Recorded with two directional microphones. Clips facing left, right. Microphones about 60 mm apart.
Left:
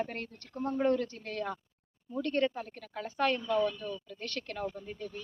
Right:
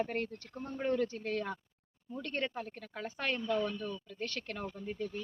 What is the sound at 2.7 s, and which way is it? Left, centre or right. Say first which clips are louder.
Speech: left 6 dB; centre.